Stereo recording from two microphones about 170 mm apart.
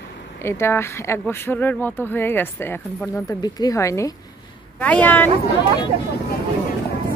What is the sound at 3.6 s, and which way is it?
Speech, 15° left (ahead or behind).